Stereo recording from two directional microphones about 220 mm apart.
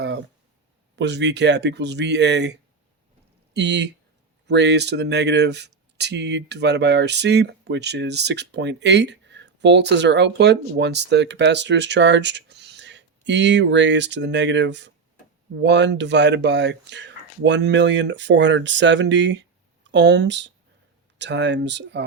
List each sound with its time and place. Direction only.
0.9 s speech: 50° right (ahead or behind)